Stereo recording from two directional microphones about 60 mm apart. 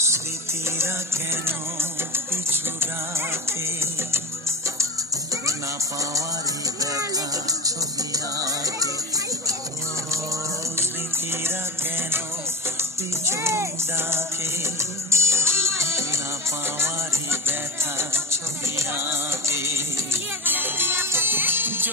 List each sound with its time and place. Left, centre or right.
0.7 s music: right
6.8 s music: right
10.1 s music: right
13.2 s music: right